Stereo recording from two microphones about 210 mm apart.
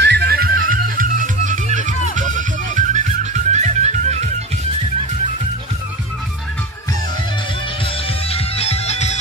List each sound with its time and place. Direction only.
0.0 s music: 50° right (ahead or behind); by 4.3 s 35° right (ahead or behind)
8.3 s music: 30° left (ahead or behind)